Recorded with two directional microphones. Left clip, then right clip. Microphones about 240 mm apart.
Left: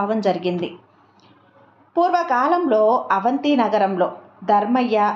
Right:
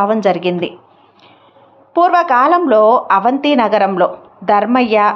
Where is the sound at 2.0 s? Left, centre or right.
Centre.